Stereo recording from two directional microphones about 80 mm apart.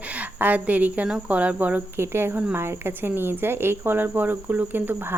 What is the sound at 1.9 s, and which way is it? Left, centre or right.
Speech, right.